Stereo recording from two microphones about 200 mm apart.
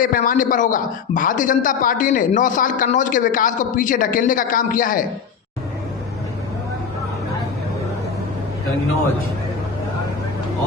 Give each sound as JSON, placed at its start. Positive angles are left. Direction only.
{"t": 0.0, "sound": "a man's voice", "side_deg": 45}